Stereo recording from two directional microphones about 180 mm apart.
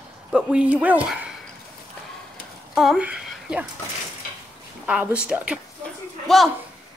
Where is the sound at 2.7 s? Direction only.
Centre (ahead or behind).